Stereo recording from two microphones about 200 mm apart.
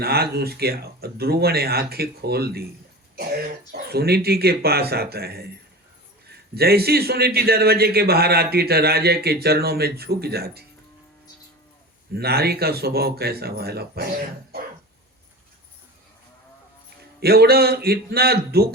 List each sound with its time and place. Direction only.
0.0 s a man's voice: 50° right (ahead or behind)
3.7 s a man's voice: 50° right (ahead or behind)
12.1 s a man's voice: 50° right (ahead or behind)
17.2 s a man's voice: 50° right (ahead or behind)